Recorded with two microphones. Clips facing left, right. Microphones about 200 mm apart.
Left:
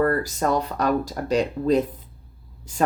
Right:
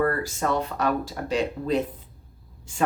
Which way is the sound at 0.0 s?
40° left (ahead or behind).